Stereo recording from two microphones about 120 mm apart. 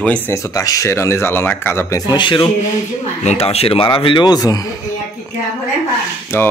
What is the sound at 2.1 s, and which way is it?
Speech, 40° left (ahead or behind).